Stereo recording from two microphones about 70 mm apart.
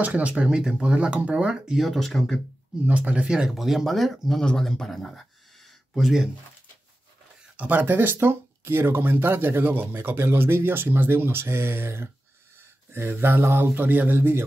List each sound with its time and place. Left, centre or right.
0.0 s speech: centre
1.9 s speech: centre
2.9 s speech: centre
7.5 s speech: right